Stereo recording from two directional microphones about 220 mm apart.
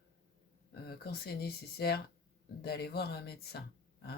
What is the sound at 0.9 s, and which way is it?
Speech, 45° left (ahead or behind).